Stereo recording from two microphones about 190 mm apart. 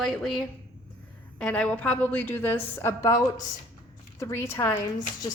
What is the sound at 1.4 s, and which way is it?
A woman's voice, 5° left (ahead or behind).